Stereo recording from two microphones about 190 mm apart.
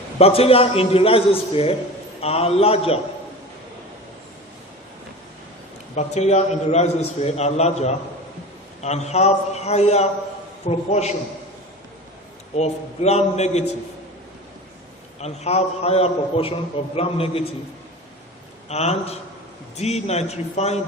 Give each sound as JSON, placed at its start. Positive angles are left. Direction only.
{"t": 0.2, "sound": "a man's voice", "side_deg": 30}
{"t": 6.0, "sound": "a man's voice", "side_deg": 35}
{"t": 12.5, "sound": "a man's voice", "side_deg": 35}
{"t": 15.2, "sound": "a man's voice", "side_deg": 35}
{"t": 18.7, "sound": "a man's voice", "side_deg": 35}